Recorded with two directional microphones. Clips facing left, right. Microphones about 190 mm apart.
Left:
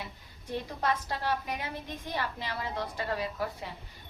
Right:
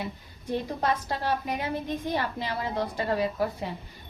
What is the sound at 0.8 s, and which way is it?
A woman's voice, 35° right (ahead or behind).